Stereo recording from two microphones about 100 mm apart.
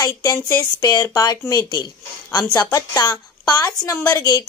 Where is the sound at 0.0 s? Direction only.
35° left (ahead or behind).